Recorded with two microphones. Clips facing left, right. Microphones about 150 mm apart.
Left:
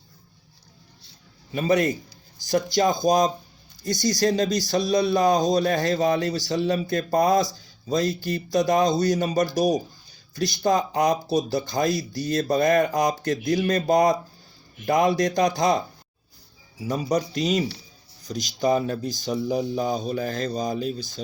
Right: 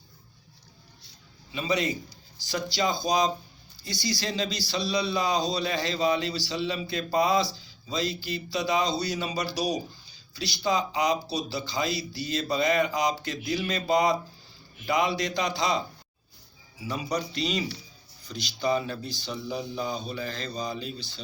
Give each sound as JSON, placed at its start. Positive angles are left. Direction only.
{"t": 1.5, "sound": "speech", "side_deg": 50}
{"t": 16.8, "sound": "speech", "side_deg": 45}